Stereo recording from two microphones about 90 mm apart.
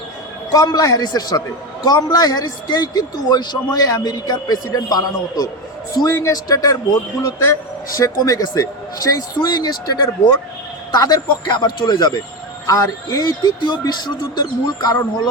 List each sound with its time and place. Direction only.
0.5 s a man's voice: 45° left (ahead or behind)
6.1 s a man's voice: 30° left (ahead or behind)
6.3 s a man's voice: 45° left (ahead or behind)
7.2 s a man's voice: 35° left (ahead or behind); by 12.1 s 55° left (ahead or behind)
12.6 s a man's voice: 40° left (ahead or behind)